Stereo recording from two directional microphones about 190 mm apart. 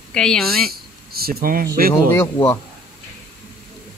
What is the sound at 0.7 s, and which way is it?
Speech, 55° right (ahead or behind).